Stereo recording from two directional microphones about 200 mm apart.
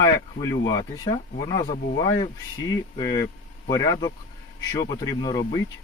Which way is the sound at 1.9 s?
20° left (ahead or behind).